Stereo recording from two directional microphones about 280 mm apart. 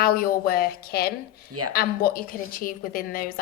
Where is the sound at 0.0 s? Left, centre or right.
Left.